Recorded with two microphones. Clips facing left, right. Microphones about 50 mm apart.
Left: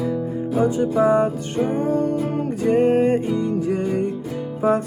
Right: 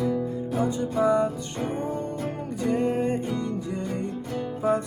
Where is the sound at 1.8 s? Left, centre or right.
Left.